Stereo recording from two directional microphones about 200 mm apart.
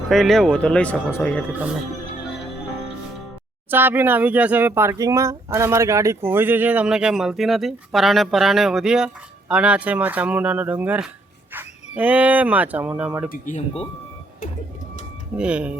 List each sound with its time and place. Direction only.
0.1 s speech: centre (ahead or behind)
3.7 s speech: 10° right (ahead or behind)
13.3 s speech: 40° left (ahead or behind)
15.4 s speech: 5° right (ahead or behind)